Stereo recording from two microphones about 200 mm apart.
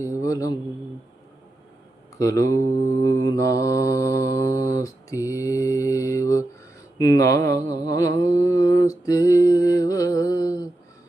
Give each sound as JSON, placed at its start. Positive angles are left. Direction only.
{"t": 0.0, "sound": "mantra", "side_deg": 15}
{"t": 2.1, "sound": "speech", "side_deg": 15}
{"t": 3.1, "sound": "mantra", "side_deg": 15}